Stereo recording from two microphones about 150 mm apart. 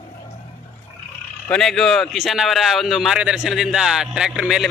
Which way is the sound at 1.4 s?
5° left (ahead or behind).